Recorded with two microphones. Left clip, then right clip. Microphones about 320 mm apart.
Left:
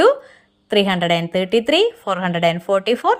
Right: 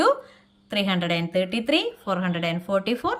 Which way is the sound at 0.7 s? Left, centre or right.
Centre.